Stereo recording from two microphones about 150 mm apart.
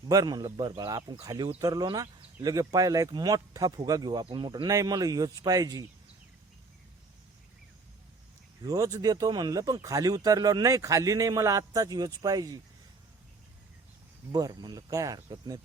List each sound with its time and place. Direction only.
0.1 s speech: 25° right (ahead or behind)
8.6 s speech: 25° right (ahead or behind)
14.3 s speech: 25° right (ahead or behind)